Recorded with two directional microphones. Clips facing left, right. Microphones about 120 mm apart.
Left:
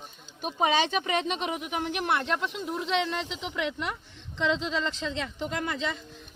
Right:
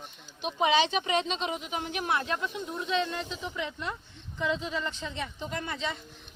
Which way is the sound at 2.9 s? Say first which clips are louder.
Even; 90° left.